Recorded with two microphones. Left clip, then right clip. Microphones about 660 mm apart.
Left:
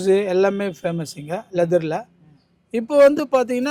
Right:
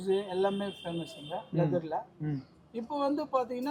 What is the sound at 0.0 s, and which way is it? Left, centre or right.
Speech, left.